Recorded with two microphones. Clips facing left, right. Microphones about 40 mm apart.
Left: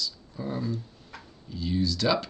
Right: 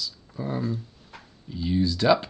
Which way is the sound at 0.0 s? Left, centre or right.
Centre.